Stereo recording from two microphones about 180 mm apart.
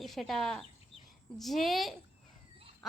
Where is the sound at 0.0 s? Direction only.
Centre (ahead or behind).